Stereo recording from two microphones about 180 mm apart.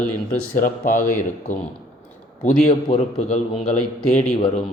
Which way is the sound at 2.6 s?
35° left (ahead or behind).